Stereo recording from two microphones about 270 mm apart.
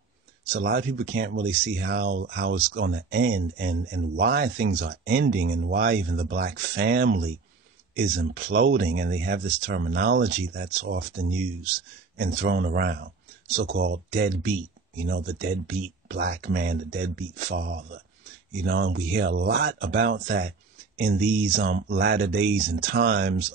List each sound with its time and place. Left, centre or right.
0.5 s speech: right
12.2 s speech: right